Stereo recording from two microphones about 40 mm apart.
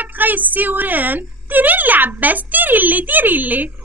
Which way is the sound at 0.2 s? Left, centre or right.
Right.